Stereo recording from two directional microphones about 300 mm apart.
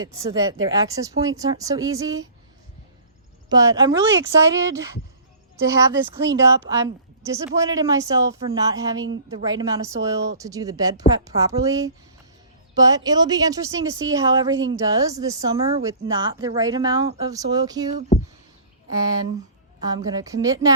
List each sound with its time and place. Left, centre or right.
0.0 s speech: centre
3.5 s speech: centre